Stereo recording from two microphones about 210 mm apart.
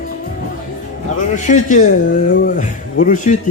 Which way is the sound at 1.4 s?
35° left (ahead or behind).